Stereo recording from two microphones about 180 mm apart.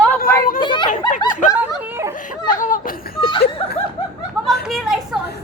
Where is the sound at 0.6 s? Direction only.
25° left (ahead or behind).